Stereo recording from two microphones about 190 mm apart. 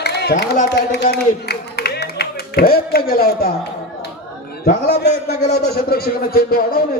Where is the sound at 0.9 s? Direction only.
60° left (ahead or behind).